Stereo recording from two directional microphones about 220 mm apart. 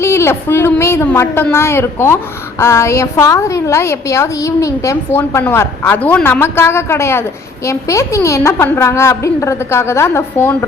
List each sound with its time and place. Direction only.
0.0 s a woman's voice: 10° left (ahead or behind)